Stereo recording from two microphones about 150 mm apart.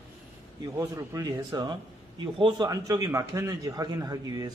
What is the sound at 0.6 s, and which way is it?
A man's voice, 20° right (ahead or behind).